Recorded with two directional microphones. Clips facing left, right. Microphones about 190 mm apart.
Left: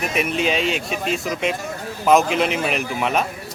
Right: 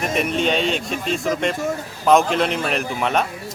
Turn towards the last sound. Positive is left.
turn(degrees=5)  # may be behind; listen again after turning